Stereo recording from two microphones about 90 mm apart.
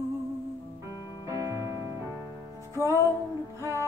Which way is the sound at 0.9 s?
45° left (ahead or behind).